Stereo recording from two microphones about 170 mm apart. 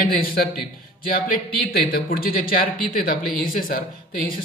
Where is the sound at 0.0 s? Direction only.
60° left (ahead or behind).